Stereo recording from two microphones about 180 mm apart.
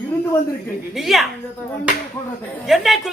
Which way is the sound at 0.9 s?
Centre (ahead or behind).